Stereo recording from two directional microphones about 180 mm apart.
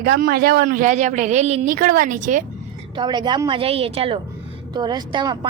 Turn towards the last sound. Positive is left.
turn(degrees=-25)  # may be behind; listen again after turning